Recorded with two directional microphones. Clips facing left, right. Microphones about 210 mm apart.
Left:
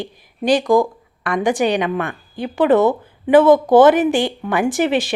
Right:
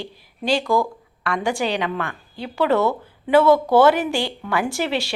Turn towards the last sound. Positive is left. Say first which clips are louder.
# left 6 dB
turn(degrees=20)  # may be behind; listen again after turning